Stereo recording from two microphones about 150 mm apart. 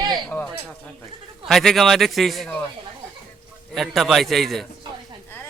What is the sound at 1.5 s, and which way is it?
A man's voice, centre (ahead or behind).